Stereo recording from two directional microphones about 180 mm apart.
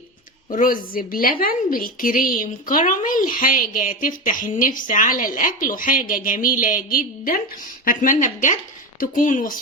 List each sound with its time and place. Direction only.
0.5 s a woman's voice: 50° left (ahead or behind)